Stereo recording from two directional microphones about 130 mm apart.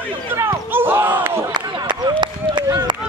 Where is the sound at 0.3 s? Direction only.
20° right (ahead or behind).